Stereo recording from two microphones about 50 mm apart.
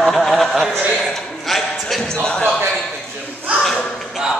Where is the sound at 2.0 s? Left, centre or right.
Centre.